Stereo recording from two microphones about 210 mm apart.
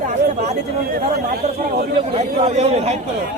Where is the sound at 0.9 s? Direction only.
45° right (ahead or behind).